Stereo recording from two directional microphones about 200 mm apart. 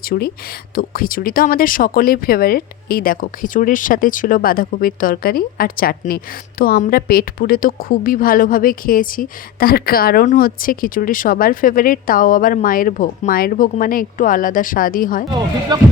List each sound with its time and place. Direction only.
0.1 s a woman's voice: 45° left (ahead or behind)
15.7 s speech: 20° right (ahead or behind)